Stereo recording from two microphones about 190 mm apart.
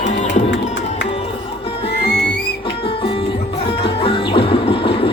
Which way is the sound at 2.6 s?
25° left (ahead or behind).